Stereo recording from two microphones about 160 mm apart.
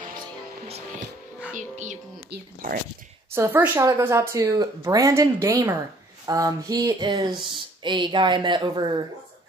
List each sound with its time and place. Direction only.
0.7 s music: 40° right (ahead or behind)
1.5 s music: 50° right (ahead or behind)
2.3 s speech: 60° right (ahead or behind)
3.3 s speech: 15° right (ahead or behind)